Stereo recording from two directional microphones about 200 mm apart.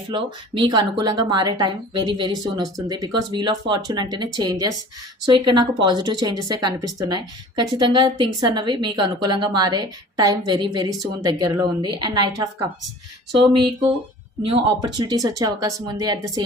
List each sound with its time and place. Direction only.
0.1 s a woman's voice: 25° right (ahead or behind)
14.8 s speech: 20° right (ahead or behind)